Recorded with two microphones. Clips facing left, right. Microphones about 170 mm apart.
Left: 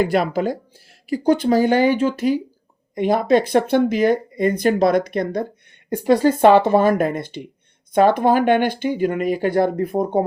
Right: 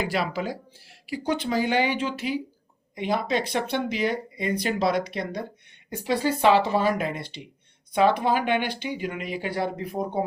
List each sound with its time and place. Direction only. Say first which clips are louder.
0.0 s speech: left 8 dB; 50° left (ahead or behind)